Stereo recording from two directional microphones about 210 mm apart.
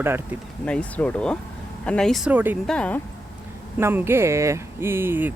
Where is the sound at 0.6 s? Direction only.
5° left (ahead or behind).